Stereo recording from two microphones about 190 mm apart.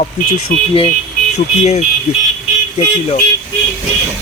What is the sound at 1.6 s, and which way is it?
Speech, 35° left (ahead or behind).